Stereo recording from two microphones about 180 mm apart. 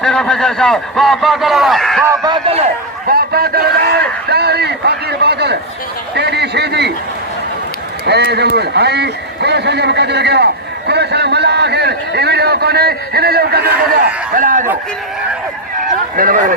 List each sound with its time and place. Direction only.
0.0 s a man's voice: 5° left (ahead or behind)
2.2 s a man's voice: 30° right (ahead or behind)
3.1 s a man's voice: 60° right (ahead or behind)
8.0 s a man's voice: 65° right (ahead or behind)
13.9 s speech: 50° right (ahead or behind)
16.1 s speech: 50° right (ahead or behind)